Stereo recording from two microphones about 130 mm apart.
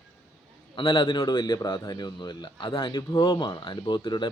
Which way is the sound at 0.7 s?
40° left (ahead or behind).